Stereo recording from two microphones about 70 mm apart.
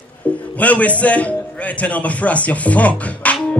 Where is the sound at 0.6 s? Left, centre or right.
Left.